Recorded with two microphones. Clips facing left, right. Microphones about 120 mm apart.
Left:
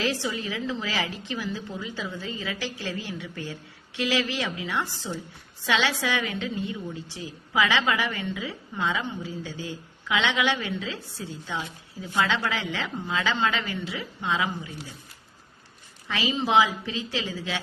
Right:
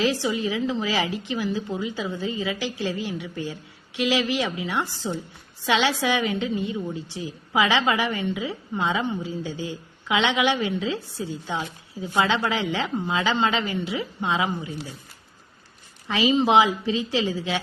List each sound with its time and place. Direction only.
0.0 s a woman's voice: 20° right (ahead or behind)
16.0 s a woman's voice: 20° right (ahead or behind)